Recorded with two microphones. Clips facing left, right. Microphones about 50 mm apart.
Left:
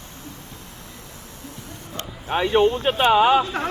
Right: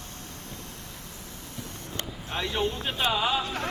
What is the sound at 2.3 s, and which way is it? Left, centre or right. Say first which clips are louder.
Speech: left 11 dB; left.